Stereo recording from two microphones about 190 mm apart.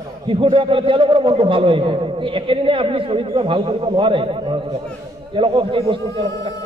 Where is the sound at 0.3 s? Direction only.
30° right (ahead or behind).